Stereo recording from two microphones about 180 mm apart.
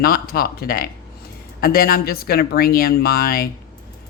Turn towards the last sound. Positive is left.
turn(degrees=55)  # may be behind; listen again after turning